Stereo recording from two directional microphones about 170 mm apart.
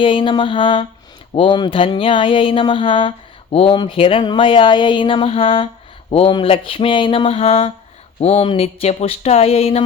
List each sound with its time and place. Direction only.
0.0 s mantra: 30° left (ahead or behind)
1.3 s speech: 30° left (ahead or behind)